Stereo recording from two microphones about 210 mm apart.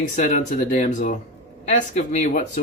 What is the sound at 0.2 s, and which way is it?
Speech, 40° left (ahead or behind).